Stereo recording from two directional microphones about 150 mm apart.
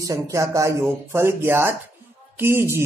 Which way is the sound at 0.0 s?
20° right (ahead or behind).